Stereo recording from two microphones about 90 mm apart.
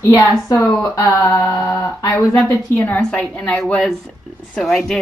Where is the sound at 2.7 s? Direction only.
20° left (ahead or behind).